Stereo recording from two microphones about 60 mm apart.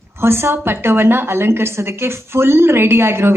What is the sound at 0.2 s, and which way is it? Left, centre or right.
A woman's voice, right.